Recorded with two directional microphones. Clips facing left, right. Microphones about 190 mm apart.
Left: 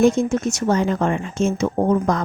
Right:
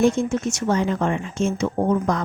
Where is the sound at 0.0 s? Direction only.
40° left (ahead or behind).